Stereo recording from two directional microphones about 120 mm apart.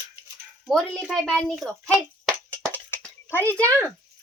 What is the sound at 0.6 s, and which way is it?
A child's voice, 5° left (ahead or behind).